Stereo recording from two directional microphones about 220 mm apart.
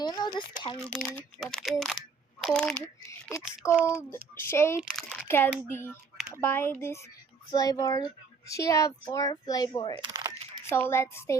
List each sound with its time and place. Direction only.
0.0 s speech: 20° left (ahead or behind)
0.9 s speech: 5° left (ahead or behind)
3.7 s a child's voice: 10° right (ahead or behind)
4.4 s speech: 10° left (ahead or behind)
10.0 s a sound: 15° right (ahead or behind)
10.7 s speech: 10° left (ahead or behind)